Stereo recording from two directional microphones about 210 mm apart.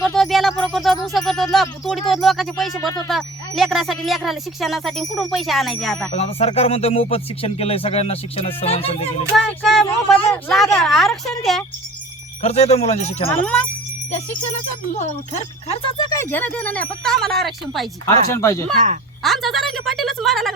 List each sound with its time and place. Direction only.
0.0 s speech: centre (ahead or behind)
6.1 s speech: 30° left (ahead or behind)
9.3 s speech: centre (ahead or behind)
12.4 s speech: 30° left (ahead or behind)
13.3 s speech: 5° left (ahead or behind)
14.9 s speech: 30° left (ahead or behind)
16.0 s speech: 10° left (ahead or behind)
18.0 s speech: 15° left (ahead or behind)
19.2 s speech: centre (ahead or behind)